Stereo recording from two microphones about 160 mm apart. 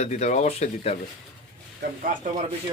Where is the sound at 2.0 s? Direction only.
55° right (ahead or behind).